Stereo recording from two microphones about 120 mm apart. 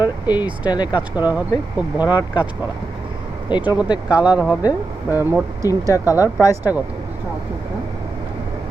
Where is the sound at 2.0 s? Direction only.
35° left (ahead or behind).